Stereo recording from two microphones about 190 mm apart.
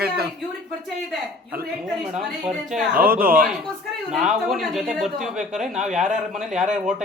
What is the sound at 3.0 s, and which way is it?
Speech, 50° right (ahead or behind).